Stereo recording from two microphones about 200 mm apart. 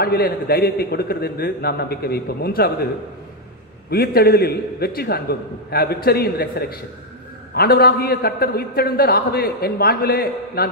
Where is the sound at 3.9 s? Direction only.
50° left (ahead or behind).